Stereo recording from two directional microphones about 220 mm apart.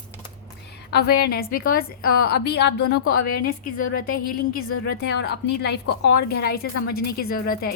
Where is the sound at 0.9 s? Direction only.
45° left (ahead or behind).